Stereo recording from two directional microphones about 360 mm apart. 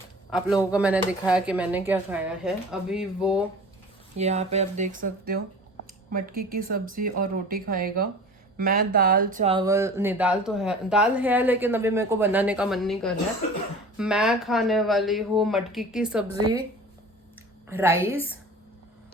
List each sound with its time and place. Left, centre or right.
0.4 s speech: centre
4.2 s speech: centre
17.7 s a woman's voice: centre